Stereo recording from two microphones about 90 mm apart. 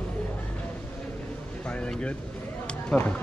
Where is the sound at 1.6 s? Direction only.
10° left (ahead or behind).